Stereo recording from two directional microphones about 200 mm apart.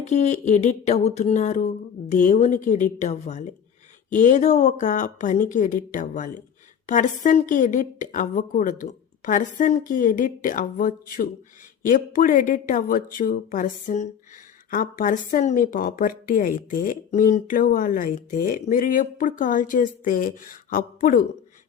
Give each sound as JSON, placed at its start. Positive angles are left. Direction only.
{"t": 0.0, "sound": "a woman's voice", "side_deg": 35}